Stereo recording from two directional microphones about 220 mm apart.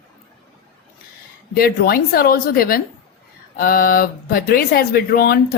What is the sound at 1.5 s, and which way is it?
Speech, 45° left (ahead or behind).